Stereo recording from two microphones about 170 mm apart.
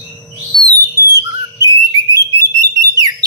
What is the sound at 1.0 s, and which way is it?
Whistle, 20° right (ahead or behind).